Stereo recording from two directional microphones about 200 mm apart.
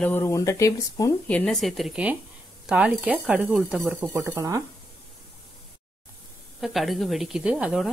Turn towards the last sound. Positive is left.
turn(degrees=-5)  # may be behind; listen again after turning